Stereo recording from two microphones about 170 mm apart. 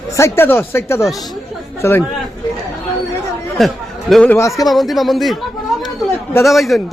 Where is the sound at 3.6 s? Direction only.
Centre (ahead or behind).